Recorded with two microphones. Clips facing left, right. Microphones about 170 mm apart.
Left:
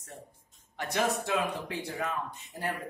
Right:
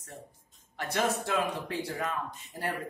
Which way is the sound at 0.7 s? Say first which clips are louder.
Even; 15° left (ahead or behind).